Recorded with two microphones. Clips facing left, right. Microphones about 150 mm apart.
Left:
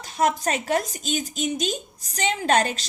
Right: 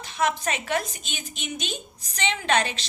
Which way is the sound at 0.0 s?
40° left (ahead or behind).